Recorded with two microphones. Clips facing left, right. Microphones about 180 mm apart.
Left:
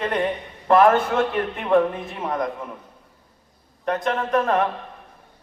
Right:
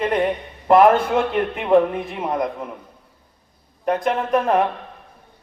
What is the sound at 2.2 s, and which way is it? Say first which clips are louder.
Speech: right 2 dB; 20° right (ahead or behind).